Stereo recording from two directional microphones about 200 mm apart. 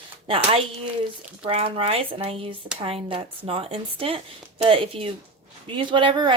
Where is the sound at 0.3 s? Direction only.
25° right (ahead or behind).